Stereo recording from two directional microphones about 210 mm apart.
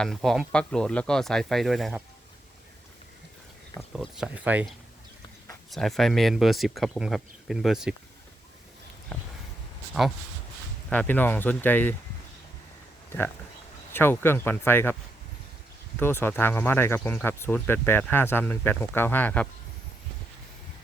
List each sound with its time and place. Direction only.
0.0 s speech: centre (ahead or behind)
3.8 s speech: centre (ahead or behind)
5.7 s speech: centre (ahead or behind)
9.1 s speech: 5° left (ahead or behind)
10.8 s speech: 5° left (ahead or behind)
13.1 s speech: 10° left (ahead or behind)
16.0 s speech: 10° left (ahead or behind)